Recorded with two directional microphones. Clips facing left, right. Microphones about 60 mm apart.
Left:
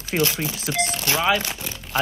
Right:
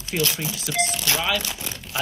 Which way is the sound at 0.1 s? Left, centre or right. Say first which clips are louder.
Left 3 dB; left.